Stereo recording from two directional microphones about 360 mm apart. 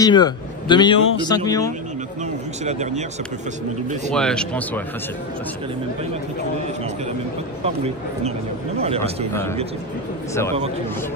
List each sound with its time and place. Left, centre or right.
0.0 s a man's voice: centre
2.6 s speech: centre
4.1 s speech: centre
7.6 s speech: centre
9.3 s a man's voice: centre